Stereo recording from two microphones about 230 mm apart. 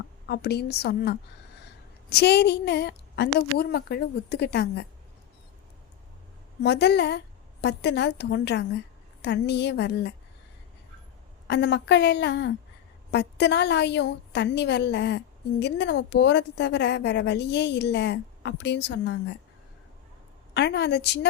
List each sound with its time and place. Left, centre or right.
0.3 s a woman's voice: left
6.6 s a woman's voice: left
11.4 s a woman's voice: left
20.5 s a woman's voice: left